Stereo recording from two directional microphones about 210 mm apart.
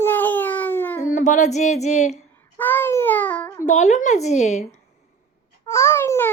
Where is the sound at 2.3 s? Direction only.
10° left (ahead or behind).